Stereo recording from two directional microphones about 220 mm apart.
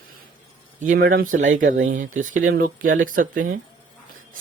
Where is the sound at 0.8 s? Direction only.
35° right (ahead or behind).